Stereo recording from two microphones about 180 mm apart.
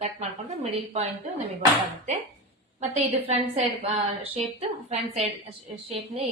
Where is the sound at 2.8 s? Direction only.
35° right (ahead or behind).